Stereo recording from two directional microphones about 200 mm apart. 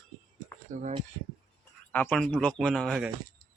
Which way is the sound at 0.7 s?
40° right (ahead or behind).